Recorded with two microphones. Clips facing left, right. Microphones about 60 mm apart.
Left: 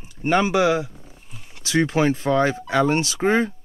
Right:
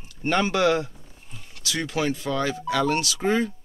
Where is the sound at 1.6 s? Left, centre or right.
Left.